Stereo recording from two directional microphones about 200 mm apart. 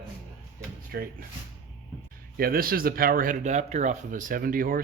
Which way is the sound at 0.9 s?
50° right (ahead or behind).